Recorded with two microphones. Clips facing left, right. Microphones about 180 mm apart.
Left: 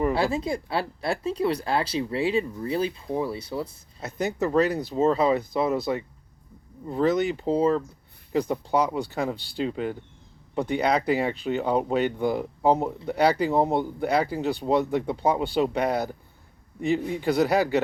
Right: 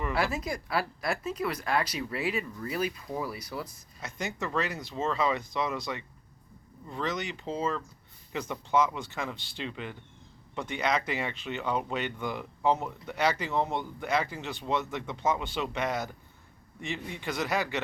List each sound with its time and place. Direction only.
0.1 s speech: 30° left (ahead or behind)